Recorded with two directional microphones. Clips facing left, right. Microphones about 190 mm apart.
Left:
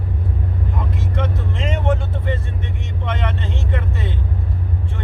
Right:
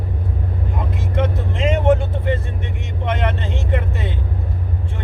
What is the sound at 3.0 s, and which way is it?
Speech, 10° right (ahead or behind).